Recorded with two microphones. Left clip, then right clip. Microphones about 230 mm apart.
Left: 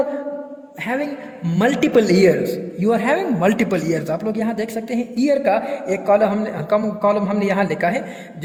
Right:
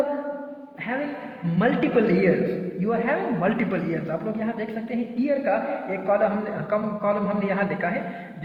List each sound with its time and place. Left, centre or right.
1.5 s a woman's voice: left
4.9 s a woman's voice: left